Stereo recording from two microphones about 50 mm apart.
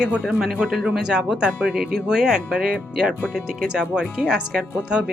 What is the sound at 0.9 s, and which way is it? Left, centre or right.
Speech, centre.